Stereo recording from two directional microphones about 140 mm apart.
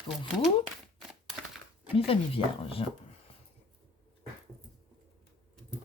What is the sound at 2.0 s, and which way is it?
Speech, 40° left (ahead or behind).